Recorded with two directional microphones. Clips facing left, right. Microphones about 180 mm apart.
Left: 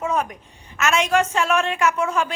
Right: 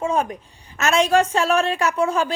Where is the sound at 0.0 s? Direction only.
30° right (ahead or behind).